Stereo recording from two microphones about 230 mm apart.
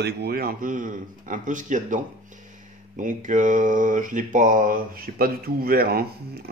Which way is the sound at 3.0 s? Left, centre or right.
Right.